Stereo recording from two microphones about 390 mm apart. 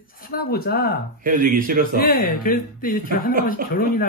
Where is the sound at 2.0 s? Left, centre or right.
Left.